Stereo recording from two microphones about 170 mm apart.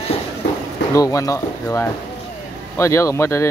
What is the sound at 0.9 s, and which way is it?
Speech, 20° left (ahead or behind).